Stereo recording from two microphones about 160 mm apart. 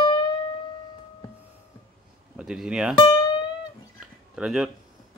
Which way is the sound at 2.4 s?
5° right (ahead or behind).